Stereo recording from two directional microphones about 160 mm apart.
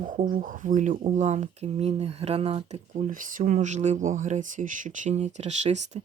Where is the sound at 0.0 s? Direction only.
60° right (ahead or behind).